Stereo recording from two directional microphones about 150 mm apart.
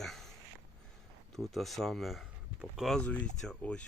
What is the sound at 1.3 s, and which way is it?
Speech, centre (ahead or behind).